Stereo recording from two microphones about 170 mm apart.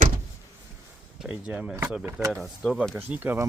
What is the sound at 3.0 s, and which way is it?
Speech, 10° right (ahead or behind).